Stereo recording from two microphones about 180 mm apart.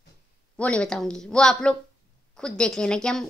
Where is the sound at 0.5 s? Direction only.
5° left (ahead or behind).